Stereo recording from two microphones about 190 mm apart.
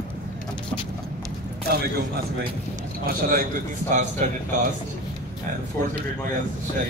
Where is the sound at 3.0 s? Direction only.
50° right (ahead or behind).